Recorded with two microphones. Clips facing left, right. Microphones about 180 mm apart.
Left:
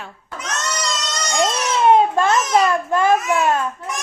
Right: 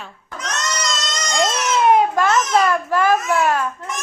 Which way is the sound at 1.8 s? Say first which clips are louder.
Left 2 dB; 25° left (ahead or behind).